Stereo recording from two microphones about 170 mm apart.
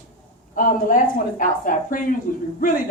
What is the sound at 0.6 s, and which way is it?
A woman's voice, 55° left (ahead or behind).